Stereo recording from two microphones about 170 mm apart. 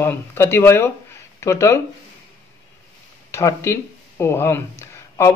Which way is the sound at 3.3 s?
15° left (ahead or behind).